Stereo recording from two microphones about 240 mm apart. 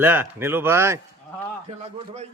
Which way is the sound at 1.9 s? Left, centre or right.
Right.